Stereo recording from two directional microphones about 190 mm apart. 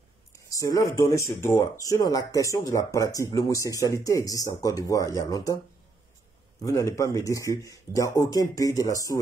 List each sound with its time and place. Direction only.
0.5 s speech: 15° left (ahead or behind)
6.6 s speech: 15° left (ahead or behind)